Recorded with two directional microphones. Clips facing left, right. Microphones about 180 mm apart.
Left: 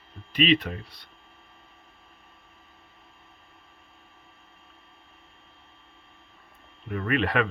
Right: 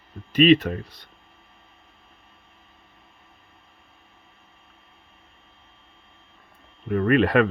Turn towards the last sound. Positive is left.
turn(degrees=-45)  # may be behind; listen again after turning